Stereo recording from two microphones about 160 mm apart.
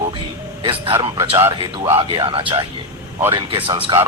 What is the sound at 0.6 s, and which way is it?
Speech, 35° right (ahead or behind).